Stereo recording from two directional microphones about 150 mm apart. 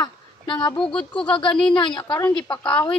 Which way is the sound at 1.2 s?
35° left (ahead or behind).